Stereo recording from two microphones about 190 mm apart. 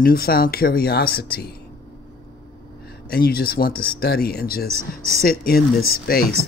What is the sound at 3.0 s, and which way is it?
Speech, 55° left (ahead or behind).